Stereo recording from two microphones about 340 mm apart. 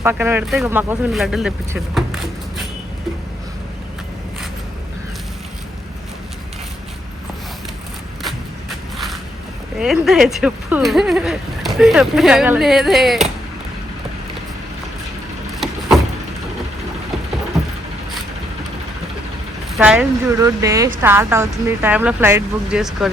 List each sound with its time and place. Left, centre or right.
0.0 s speech: centre
9.7 s speech: centre
17.5 s vehicle: centre
19.7 s speech: centre